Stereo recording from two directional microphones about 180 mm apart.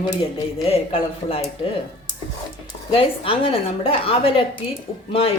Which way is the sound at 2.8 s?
30° left (ahead or behind).